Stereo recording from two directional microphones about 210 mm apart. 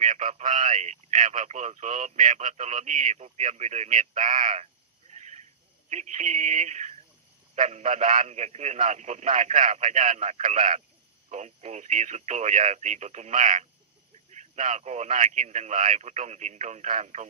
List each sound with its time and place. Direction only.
0.0 s speech: 35° right (ahead or behind)
5.1 s a sound: 35° right (ahead or behind)
5.9 s speech: 35° right (ahead or behind)